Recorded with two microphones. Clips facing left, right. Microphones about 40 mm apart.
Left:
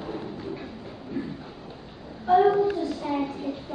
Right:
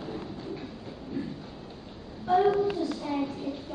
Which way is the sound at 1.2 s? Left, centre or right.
Centre.